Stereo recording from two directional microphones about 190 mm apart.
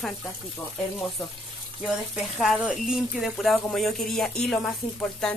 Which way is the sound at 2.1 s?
Centre (ahead or behind).